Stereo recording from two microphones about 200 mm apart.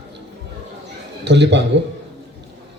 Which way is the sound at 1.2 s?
60° right (ahead or behind).